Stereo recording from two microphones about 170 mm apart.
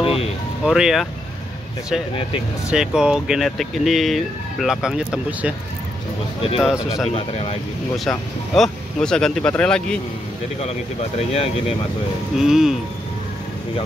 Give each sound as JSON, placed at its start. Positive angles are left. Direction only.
{"t": 0.0, "sound": "music", "side_deg": 35}
{"t": 0.7, "sound": "speech", "side_deg": -5}
{"t": 2.7, "sound": "speech", "side_deg": -5}
{"t": 6.6, "sound": "speech", "side_deg": -5}
{"t": 7.1, "sound": "speech", "side_deg": 35}
{"t": 8.0, "sound": "speech", "side_deg": 0}
{"t": 10.6, "sound": "speech", "side_deg": 35}
{"t": 12.4, "sound": "speech", "side_deg": -5}